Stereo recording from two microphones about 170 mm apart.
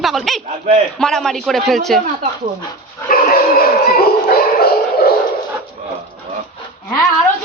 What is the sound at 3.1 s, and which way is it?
Dog, 55° left (ahead or behind).